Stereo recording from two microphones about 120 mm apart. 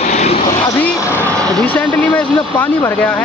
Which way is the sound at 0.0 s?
65° left (ahead or behind).